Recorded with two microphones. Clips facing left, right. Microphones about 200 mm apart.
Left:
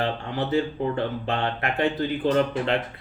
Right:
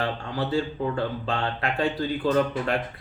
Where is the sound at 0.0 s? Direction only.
20° left (ahead or behind).